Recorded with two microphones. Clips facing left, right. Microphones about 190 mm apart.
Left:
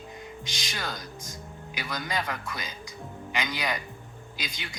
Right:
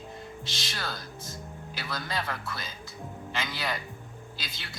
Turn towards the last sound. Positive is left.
turn(degrees=15)  # may be behind; listen again after turning